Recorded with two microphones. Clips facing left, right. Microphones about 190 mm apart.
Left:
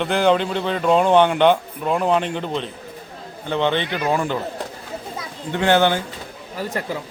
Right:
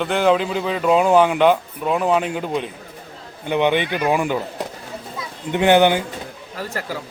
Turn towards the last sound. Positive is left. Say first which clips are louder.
# left 2 dB
turn(degrees=20)  # may be behind; listen again after turning